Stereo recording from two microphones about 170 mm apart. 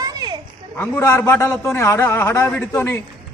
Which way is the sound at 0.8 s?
15° left (ahead or behind).